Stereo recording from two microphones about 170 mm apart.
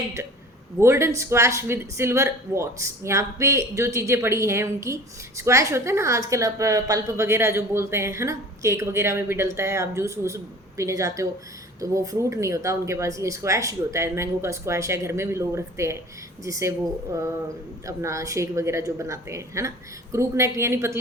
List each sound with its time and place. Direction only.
0.8 s a woman's voice: 15° right (ahead or behind)
17.8 s a woman's voice: 20° right (ahead or behind)